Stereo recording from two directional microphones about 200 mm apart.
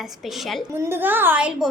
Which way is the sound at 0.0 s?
Centre (ahead or behind).